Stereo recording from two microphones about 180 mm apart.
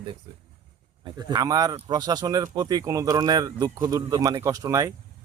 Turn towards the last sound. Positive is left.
turn(degrees=-20)  # may be behind; listen again after turning